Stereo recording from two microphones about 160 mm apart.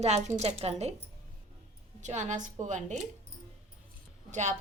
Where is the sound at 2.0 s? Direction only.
50° right (ahead or behind).